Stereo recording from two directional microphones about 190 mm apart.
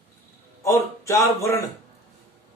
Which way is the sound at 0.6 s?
15° left (ahead or behind).